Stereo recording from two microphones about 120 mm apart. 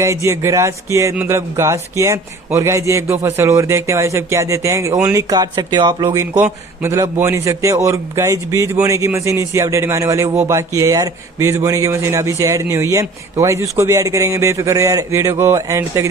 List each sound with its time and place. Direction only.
0.0 s a man's voice: 25° right (ahead or behind)